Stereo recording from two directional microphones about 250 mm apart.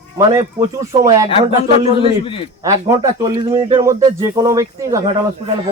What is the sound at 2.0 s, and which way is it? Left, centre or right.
Speech, left.